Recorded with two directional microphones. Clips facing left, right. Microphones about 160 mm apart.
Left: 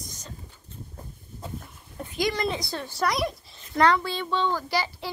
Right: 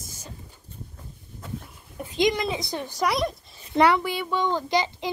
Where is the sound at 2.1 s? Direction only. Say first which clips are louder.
Right 3 dB; 20° right (ahead or behind).